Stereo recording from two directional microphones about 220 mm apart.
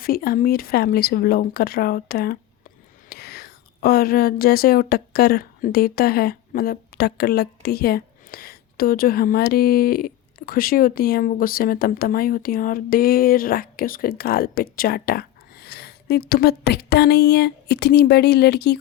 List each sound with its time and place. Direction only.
0.0 s speech: 45° left (ahead or behind)